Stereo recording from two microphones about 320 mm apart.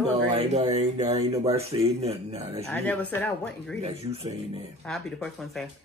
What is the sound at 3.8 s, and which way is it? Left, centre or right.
Speech, centre.